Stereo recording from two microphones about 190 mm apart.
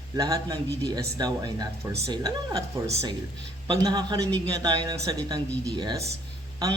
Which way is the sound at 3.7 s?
20° right (ahead or behind).